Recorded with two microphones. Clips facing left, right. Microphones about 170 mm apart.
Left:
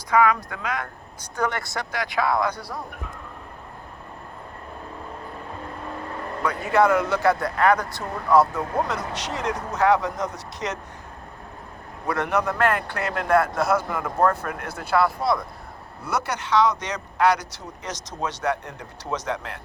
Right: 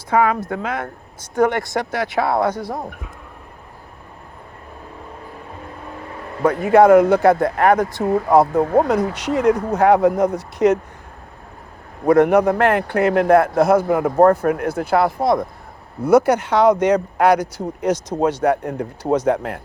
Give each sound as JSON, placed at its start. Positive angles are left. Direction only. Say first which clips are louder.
{"t": 0.1, "sound": "speech", "louder": "right 3 dB", "side_deg": -30}
{"t": 1.9, "sound": "speech", "louder": "right 2 dB", "side_deg": -25}
{"t": 2.5, "sound": "a man's voice", "louder": "right 8 dB", "side_deg": -45}
{"t": 6.4, "sound": "a man's voice", "louder": "right 8 dB", "side_deg": -50}
{"t": 12.0, "sound": "a man's voice", "louder": "right 11 dB", "side_deg": -55}